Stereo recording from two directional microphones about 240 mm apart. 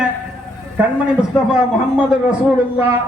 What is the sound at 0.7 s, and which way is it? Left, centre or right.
Speech, centre.